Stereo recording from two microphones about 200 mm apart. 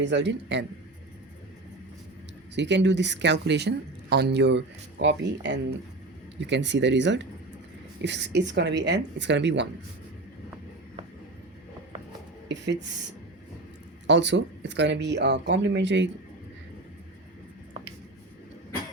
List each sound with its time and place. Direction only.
0.0 s speech: 60° right (ahead or behind)
2.6 s speech: 60° right (ahead or behind)
12.5 s speech: 65° right (ahead or behind)
14.1 s speech: 60° right (ahead or behind)